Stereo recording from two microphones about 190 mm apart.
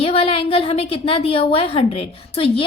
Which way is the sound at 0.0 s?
30° left (ahead or behind).